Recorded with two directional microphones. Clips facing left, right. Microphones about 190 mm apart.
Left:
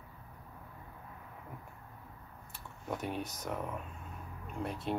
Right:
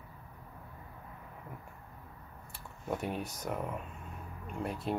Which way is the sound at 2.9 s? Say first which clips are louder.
Right 2 dB; 5° right (ahead or behind).